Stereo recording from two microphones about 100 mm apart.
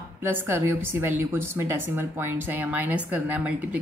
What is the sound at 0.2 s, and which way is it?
A woman's voice, 25° right (ahead or behind).